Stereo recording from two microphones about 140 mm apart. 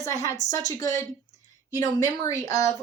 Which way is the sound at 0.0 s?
25° left (ahead or behind).